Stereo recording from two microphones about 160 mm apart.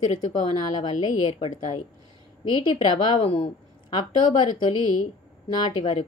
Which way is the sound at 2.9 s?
30° left (ahead or behind).